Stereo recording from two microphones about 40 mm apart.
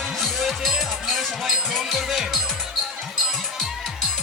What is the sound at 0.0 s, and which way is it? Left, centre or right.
Music, centre.